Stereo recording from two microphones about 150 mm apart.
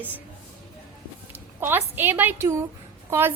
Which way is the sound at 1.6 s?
15° right (ahead or behind).